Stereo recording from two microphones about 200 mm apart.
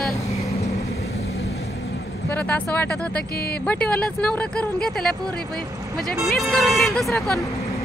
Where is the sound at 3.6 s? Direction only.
5° left (ahead or behind).